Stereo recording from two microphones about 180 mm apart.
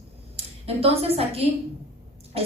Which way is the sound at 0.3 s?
35° right (ahead or behind).